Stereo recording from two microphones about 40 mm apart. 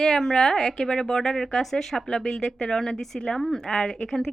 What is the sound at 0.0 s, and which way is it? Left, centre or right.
A woman's voice, centre.